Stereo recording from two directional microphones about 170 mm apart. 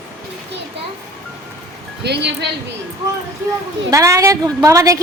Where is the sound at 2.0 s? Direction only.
80° right.